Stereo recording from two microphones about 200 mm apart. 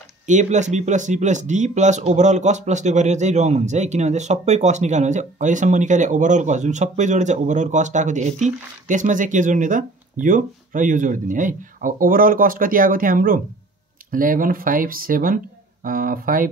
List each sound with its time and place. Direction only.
0.3 s speech: 35° right (ahead or behind)